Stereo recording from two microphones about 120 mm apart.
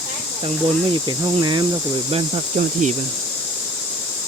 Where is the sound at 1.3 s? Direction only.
40° right (ahead or behind).